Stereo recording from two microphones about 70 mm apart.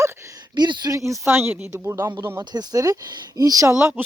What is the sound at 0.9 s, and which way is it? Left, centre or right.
Speech, right.